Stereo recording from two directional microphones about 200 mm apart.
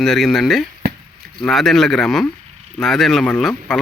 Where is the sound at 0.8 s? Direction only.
55° right (ahead or behind).